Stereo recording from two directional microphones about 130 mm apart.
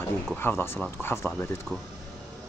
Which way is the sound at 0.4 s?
15° left (ahead or behind).